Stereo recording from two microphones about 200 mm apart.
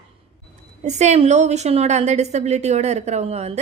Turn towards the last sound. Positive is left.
turn(degrees=-30)  # may be behind; listen again after turning